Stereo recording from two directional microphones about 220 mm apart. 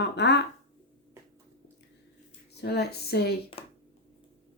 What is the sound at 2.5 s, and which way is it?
Speech, 45° left (ahead or behind).